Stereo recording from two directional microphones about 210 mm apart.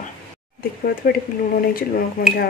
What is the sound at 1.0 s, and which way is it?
Speech, 40° left (ahead or behind).